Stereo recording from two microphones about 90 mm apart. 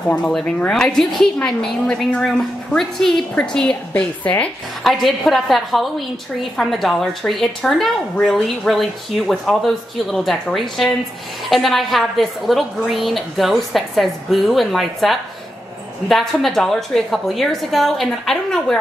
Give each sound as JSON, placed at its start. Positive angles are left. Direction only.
{"t": 0.1, "sound": "a woman's voice", "side_deg": 5}
{"t": 4.8, "sound": "speech", "side_deg": 0}